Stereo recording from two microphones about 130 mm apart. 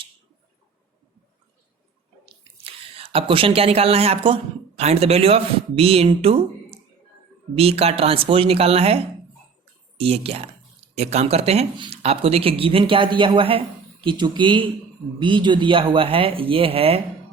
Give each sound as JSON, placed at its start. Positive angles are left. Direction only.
{"t": 2.6, "sound": "speech", "side_deg": -50}
{"t": 10.0, "sound": "speech", "side_deg": -50}